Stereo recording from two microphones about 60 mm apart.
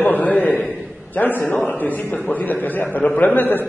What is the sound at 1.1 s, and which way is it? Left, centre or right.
A man's voice, left.